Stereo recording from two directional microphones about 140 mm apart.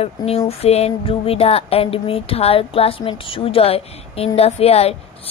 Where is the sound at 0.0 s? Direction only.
45° left (ahead or behind).